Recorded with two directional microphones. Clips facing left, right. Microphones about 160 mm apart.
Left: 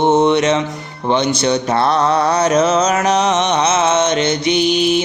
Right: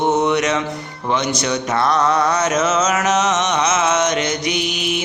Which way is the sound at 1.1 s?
30° left (ahead or behind).